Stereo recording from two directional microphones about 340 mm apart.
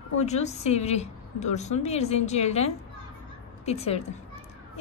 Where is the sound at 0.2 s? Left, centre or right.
Centre.